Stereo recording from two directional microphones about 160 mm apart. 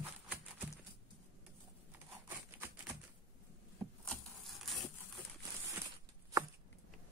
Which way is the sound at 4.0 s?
Centre (ahead or behind).